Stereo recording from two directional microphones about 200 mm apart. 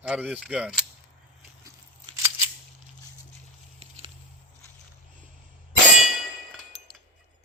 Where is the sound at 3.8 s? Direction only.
30° right (ahead or behind).